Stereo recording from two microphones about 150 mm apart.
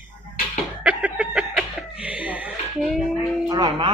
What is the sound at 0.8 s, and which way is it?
Chuckle, 10° right (ahead or behind).